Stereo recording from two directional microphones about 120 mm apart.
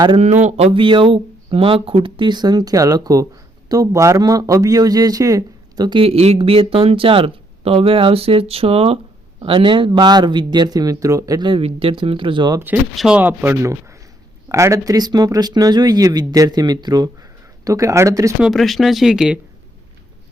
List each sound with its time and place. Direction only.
0.4 s a man's voice: 60° right (ahead or behind); by 11.4 s 30° right (ahead or behind)
11.4 s a man's voice: 50° right (ahead or behind)
13.0 s speech: 10° right (ahead or behind); by 18.3 s 25° right (ahead or behind)
18.3 s speech: centre (ahead or behind)